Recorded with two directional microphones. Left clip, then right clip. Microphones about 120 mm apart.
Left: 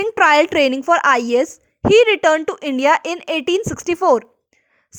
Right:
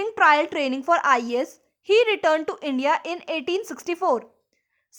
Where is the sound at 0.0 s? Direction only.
55° left (ahead or behind).